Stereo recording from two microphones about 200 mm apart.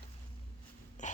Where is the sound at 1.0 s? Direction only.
35° left (ahead or behind).